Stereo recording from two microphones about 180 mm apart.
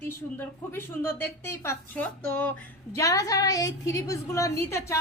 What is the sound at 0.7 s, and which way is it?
A woman's voice, 10° left (ahead or behind).